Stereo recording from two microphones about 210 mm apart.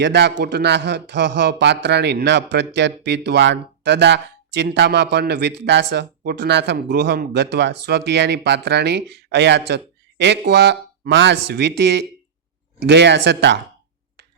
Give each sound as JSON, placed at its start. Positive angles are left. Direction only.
{"t": 0.0, "sound": "speech", "side_deg": -55}